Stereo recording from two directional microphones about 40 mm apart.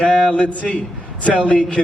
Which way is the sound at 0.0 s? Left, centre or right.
Left.